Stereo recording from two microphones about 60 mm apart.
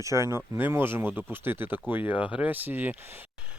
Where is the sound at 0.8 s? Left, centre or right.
Right.